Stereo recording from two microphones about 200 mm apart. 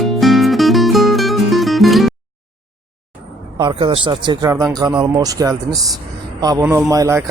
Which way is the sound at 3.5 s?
20° right (ahead or behind).